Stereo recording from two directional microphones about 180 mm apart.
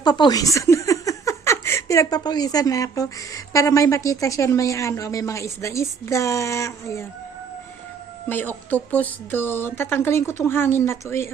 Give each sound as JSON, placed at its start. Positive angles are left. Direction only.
{"t": 0.0, "sound": "speech", "side_deg": 25}
{"t": 8.3, "sound": "speech", "side_deg": 10}